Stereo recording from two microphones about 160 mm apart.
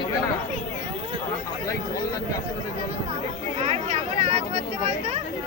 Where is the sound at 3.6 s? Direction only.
45° right (ahead or behind).